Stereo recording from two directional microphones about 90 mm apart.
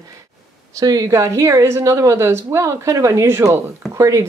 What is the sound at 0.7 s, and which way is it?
Speech, 40° right (ahead or behind).